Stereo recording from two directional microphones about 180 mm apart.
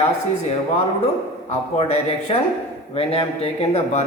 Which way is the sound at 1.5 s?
35° left (ahead or behind).